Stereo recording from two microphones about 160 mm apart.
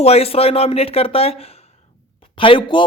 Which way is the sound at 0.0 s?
40° left (ahead or behind).